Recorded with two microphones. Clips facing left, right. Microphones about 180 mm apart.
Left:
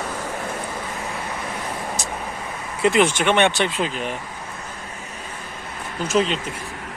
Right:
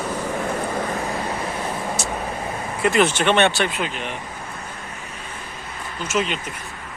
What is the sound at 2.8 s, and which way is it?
Speech, 25° left (ahead or behind).